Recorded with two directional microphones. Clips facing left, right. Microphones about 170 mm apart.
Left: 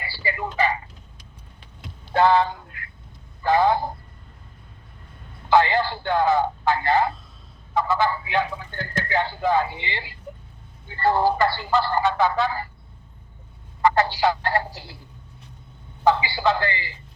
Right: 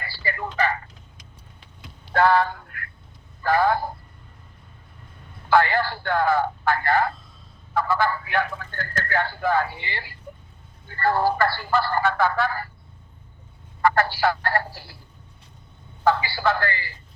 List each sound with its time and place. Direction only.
0.0 s speech: 15° left (ahead or behind)
2.1 s a sound: 20° left (ahead or behind)
3.4 s a man's voice: 20° left (ahead or behind)
5.5 s a man's voice: 20° left (ahead or behind)
13.8 s a man's voice: 20° left (ahead or behind)
16.0 s a man's voice: 20° left (ahead or behind)